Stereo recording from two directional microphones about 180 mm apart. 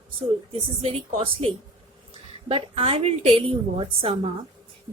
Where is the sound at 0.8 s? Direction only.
35° right (ahead or behind).